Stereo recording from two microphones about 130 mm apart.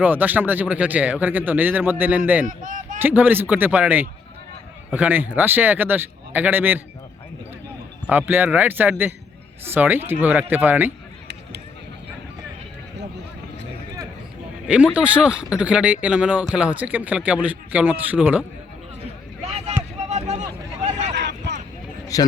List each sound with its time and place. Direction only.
0.0 s a man's voice: 15° right (ahead or behind)
2.5 s speech: 80° right
3.0 s a man's voice: 15° right (ahead or behind)
8.1 s a man's voice: 15° right (ahead or behind)
14.7 s a man's voice: 10° right (ahead or behind)
19.5 s vehicle: 55° right (ahead or behind)
20.0 s a sound: 60° right (ahead or behind)
22.1 s a man's voice: 25° left (ahead or behind)